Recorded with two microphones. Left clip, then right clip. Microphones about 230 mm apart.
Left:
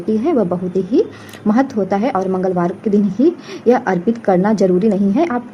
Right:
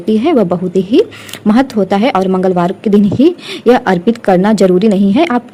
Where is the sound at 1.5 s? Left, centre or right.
Right.